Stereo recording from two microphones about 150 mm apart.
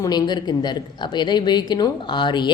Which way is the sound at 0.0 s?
25° left (ahead or behind).